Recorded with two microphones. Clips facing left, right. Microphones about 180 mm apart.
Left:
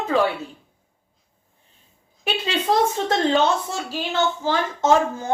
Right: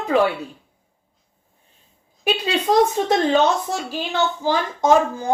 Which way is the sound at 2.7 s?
15° right (ahead or behind).